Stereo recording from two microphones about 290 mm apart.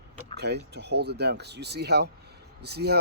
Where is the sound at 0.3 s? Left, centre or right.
Right.